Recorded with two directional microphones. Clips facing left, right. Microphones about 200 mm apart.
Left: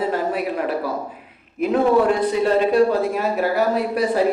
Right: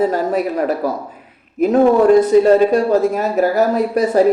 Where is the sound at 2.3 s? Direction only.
40° right (ahead or behind).